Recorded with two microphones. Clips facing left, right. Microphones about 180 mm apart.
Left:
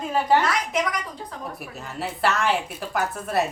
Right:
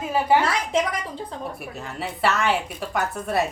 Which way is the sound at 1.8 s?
Centre (ahead or behind).